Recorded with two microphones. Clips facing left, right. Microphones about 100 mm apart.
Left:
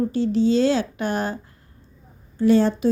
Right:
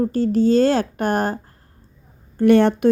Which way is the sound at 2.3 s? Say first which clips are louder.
Right 3 dB; 60° right (ahead or behind).